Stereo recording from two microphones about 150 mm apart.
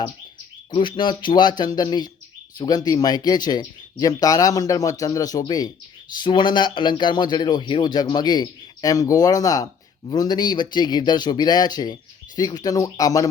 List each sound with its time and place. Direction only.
0.7 s speech: 35° left (ahead or behind)